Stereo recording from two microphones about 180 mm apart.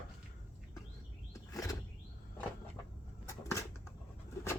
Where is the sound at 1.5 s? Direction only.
20° left (ahead or behind).